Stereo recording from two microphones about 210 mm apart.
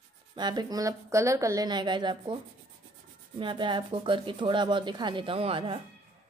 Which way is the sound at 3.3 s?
25° right (ahead or behind).